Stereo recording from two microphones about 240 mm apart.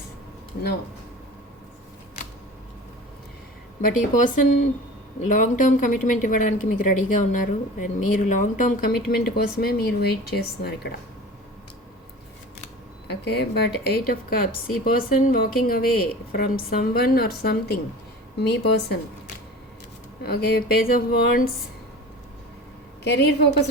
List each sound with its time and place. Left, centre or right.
3.8 s speech: left
13.1 s a woman's voice: left
20.2 s speech: left
23.0 s a woman's voice: left